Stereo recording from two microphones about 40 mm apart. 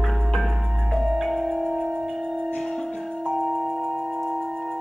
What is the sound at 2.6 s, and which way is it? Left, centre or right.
Music, centre.